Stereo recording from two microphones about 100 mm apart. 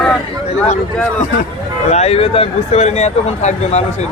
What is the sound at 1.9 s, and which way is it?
Speech, 85° left.